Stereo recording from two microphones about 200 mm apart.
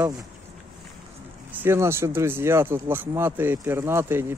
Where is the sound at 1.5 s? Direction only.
10° right (ahead or behind).